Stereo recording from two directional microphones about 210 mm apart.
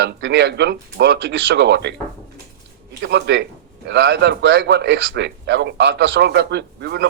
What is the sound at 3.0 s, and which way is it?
A man's voice, 55° right (ahead or behind).